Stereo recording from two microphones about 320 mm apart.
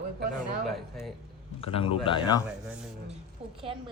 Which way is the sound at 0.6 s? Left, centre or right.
Centre.